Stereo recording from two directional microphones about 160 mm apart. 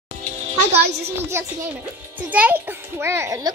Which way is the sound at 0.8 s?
90° right.